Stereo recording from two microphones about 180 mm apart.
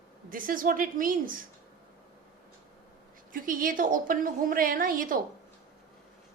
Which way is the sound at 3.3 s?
50° right (ahead or behind).